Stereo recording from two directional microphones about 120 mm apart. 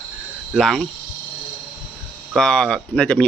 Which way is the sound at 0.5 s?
5° left (ahead or behind).